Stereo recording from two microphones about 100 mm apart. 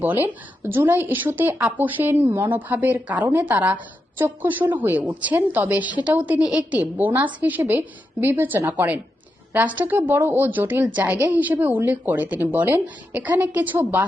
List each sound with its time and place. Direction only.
0.6 s a woman's voice: 20° right (ahead or behind)